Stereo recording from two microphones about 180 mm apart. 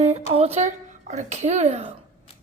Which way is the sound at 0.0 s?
35° right (ahead or behind).